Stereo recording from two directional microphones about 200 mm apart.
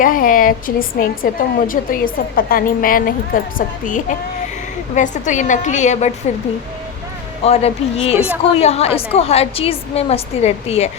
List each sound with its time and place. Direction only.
0.0 s a woman's voice: 45° left (ahead or behind)
4.9 s a woman's voice: 40° left (ahead or behind)
7.4 s a woman's voice: 30° left (ahead or behind)
8.1 s a woman's voice: 10° right (ahead or behind)
8.5 s a woman's voice: 30° left (ahead or behind)